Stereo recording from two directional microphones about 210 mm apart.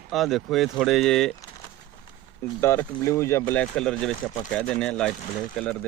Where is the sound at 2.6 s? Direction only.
10° left (ahead or behind).